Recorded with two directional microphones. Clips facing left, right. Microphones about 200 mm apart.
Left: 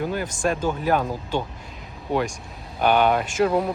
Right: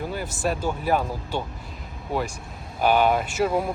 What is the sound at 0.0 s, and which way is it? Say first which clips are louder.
Speech: left 3 dB; 5° right (ahead or behind).